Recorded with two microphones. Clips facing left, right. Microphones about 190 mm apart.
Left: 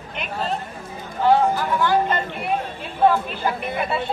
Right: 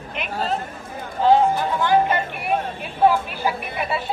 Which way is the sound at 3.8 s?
5° right (ahead or behind).